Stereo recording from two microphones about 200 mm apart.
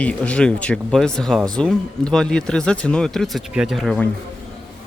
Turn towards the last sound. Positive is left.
turn(degrees=0)  # may be behind; listen again after turning